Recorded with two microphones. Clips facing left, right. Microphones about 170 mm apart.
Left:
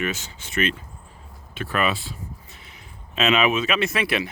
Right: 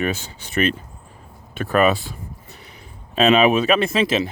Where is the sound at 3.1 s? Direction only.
35° right (ahead or behind).